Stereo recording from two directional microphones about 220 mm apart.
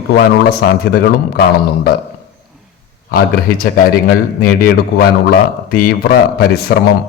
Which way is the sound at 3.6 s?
40° left (ahead or behind).